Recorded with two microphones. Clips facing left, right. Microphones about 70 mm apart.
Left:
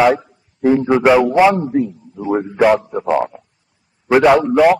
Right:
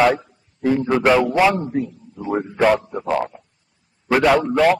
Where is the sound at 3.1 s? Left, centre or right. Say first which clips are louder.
Left 4 dB; centre.